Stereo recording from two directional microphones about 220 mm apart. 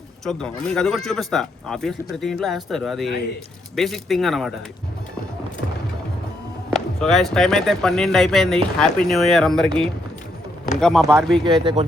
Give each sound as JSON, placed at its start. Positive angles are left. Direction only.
{"t": 0.3, "sound": "speech", "side_deg": 5}
{"t": 6.7, "sound": "speech", "side_deg": 0}
{"t": 11.4, "sound": "speech", "side_deg": -20}